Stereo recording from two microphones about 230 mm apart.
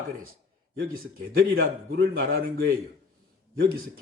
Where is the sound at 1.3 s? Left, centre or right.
Right.